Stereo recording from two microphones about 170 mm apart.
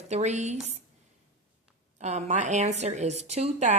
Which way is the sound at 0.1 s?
40° right (ahead or behind).